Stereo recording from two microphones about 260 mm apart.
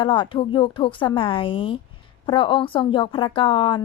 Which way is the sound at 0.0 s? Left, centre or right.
Centre.